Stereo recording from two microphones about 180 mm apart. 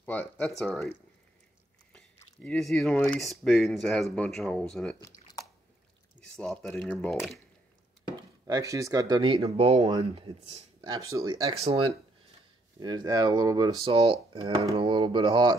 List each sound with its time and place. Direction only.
0.0 s speech: 10° left (ahead or behind)
2.1 s speech: 5° left (ahead or behind)
6.3 s speech: 5° left (ahead or behind)
8.5 s speech: 20° right (ahead or behind)
10.8 s speech: 20° right (ahead or behind)
11.5 s speech: 35° right (ahead or behind)
12.8 s speech: 25° right (ahead or behind)